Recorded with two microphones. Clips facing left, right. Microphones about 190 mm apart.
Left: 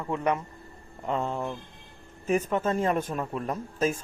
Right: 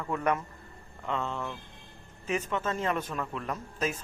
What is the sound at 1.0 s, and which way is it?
Speech, 40° left (ahead or behind).